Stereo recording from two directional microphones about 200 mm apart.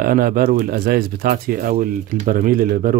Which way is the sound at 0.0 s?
45° right (ahead or behind).